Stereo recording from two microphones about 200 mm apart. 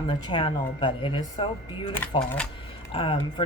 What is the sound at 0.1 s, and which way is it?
Speech, 25° left (ahead or behind).